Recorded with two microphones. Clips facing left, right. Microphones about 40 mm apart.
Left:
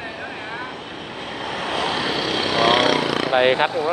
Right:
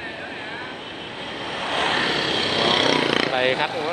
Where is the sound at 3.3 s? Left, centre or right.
Centre.